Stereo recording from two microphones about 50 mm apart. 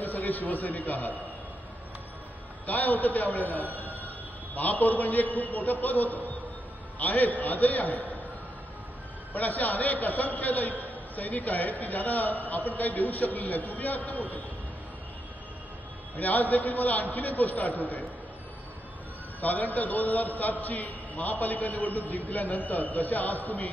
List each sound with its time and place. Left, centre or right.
0.0 s a man's voice: left
2.6 s a man's voice: left
9.3 s a man's voice: left
16.2 s a man's voice: left
19.4 s a man's voice: left